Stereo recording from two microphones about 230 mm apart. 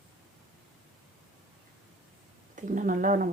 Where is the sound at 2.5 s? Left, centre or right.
Right.